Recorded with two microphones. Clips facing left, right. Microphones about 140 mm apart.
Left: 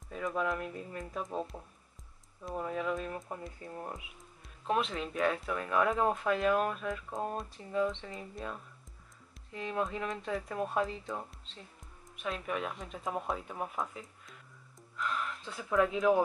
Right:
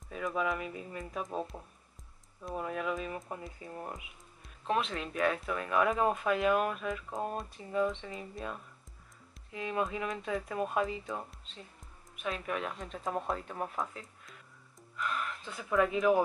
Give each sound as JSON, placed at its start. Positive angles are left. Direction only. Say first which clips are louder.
{"t": 0.1, "sound": "speech", "louder": "even", "side_deg": -5}